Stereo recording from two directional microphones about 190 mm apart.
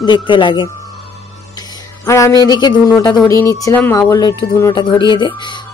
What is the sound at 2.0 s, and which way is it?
Speech, 15° left (ahead or behind).